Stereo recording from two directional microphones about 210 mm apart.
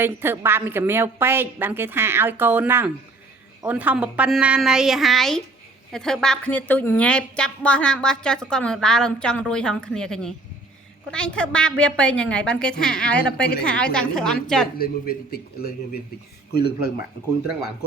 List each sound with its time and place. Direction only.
0.0 s a woman's voice: 10° right (ahead or behind); by 13.4 s 5° left (ahead or behind)
13.4 s a man's voice: 50° left (ahead or behind)
13.7 s a woman's voice: 5° left (ahead or behind)
14.8 s a man's voice: 45° left (ahead or behind)
17.4 s a woman's voice: 5° right (ahead or behind)